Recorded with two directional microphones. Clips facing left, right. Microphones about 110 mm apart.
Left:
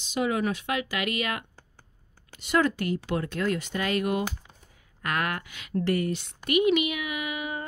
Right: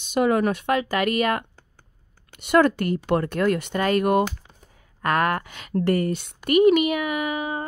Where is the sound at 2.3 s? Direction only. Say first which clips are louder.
Right 6 dB; 60° right (ahead or behind); by 7.6 s 35° right (ahead or behind).